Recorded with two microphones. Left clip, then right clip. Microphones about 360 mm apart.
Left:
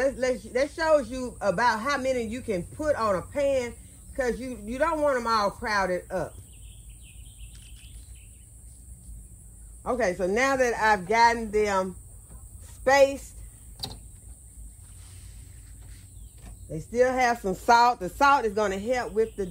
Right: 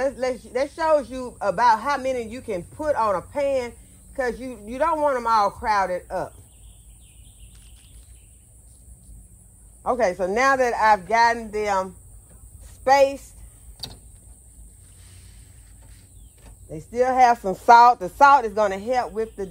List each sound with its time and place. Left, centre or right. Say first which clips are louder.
0.0 s a man's voice: right 1 dB; centre
9.8 s a man's voice: right 4 dB; centre
16.6 s a man's voice: right 2 dB; centre